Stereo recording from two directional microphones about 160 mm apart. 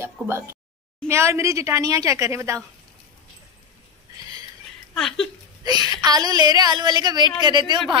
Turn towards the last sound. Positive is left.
turn(degrees=-30)  # may be behind; listen again after turning